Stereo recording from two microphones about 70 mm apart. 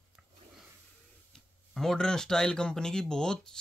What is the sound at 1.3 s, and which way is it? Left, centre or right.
Speech, centre.